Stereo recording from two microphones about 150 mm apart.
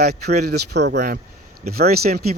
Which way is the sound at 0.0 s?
90° right.